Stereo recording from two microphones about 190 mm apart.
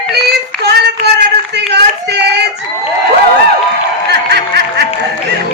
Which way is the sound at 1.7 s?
60° right (ahead or behind).